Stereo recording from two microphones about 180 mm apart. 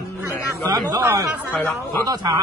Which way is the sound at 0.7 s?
20° right (ahead or behind).